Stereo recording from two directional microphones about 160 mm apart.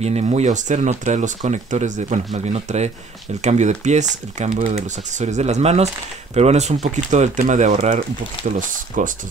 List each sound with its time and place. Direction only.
0.0 s speech: 40° right (ahead or behind)